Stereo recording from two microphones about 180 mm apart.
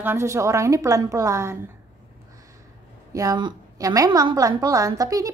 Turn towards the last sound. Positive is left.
turn(degrees=-20)  # may be behind; listen again after turning